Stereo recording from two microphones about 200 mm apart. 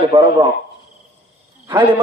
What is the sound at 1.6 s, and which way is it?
Speech, 25° right (ahead or behind).